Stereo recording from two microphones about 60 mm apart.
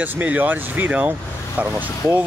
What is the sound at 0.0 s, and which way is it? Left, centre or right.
Speech, right.